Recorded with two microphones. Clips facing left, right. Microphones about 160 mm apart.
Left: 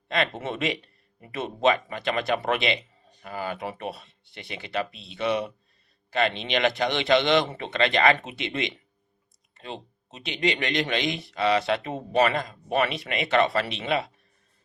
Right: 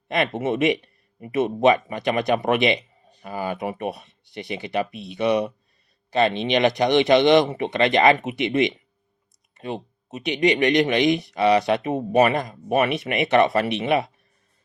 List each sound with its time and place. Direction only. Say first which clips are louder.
0.1 s speech: right 5 dB; 15° right (ahead or behind)